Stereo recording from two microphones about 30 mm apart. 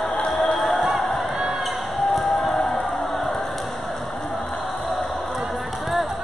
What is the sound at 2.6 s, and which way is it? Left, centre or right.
Choir, centre.